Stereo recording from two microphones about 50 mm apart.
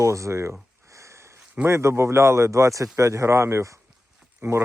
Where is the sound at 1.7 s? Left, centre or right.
Right.